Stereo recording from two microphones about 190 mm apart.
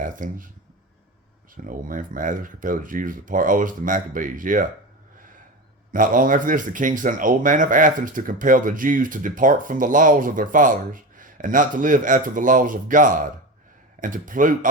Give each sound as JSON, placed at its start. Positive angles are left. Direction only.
{"t": 0.0, "sound": "speech", "side_deg": -45}
{"t": 1.6, "sound": "speech", "side_deg": -45}
{"t": 5.9, "sound": "speech", "side_deg": -45}